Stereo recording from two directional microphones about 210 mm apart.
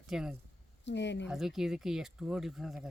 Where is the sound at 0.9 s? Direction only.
55° left (ahead or behind).